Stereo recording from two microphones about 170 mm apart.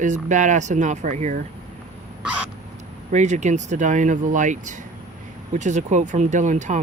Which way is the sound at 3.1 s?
45° right (ahead or behind).